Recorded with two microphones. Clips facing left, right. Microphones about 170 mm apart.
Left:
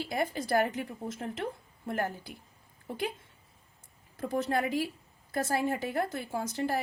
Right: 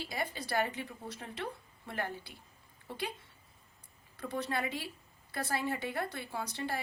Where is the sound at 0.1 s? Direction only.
50° left (ahead or behind).